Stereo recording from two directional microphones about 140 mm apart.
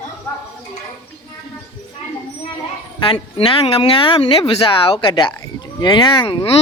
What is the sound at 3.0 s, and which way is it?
Speech, 40° left (ahead or behind).